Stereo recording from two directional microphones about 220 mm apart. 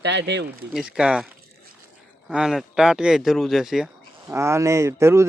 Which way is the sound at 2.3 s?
Centre (ahead or behind).